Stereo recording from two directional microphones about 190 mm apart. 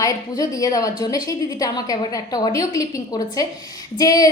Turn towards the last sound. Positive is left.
turn(degrees=20)  # may be behind; listen again after turning